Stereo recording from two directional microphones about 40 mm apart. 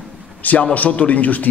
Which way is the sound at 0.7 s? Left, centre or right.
Left.